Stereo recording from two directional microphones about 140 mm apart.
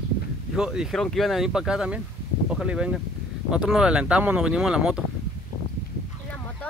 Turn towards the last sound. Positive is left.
turn(degrees=-5)  # may be behind; listen again after turning